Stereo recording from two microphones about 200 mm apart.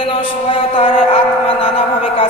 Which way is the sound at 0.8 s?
30° left (ahead or behind).